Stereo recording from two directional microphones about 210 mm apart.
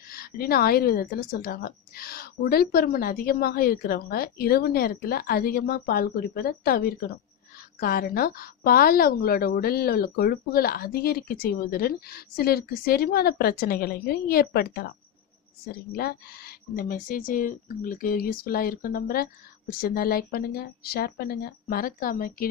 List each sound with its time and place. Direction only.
0.1 s a woman's voice: 45° left (ahead or behind)